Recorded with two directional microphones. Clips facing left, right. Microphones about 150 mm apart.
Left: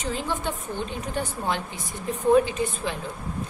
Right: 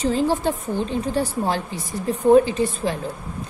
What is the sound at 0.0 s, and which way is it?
A woman's voice, 35° right (ahead or behind).